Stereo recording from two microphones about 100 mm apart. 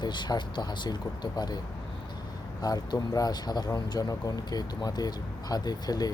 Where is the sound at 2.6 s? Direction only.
40° left (ahead or behind).